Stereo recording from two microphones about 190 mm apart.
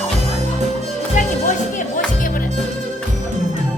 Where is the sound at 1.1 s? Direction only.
40° left (ahead or behind).